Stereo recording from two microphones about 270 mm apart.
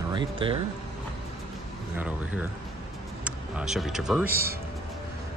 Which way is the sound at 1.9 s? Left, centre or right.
Centre.